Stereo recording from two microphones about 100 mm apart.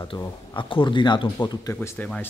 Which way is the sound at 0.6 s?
55° left (ahead or behind).